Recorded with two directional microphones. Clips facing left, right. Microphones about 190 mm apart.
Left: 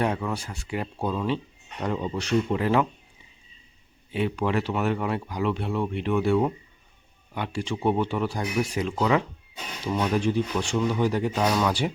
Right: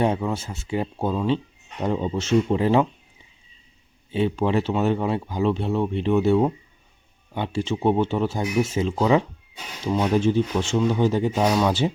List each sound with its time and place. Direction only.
0.0 s speech: 20° right (ahead or behind)
4.1 s speech: 25° right (ahead or behind)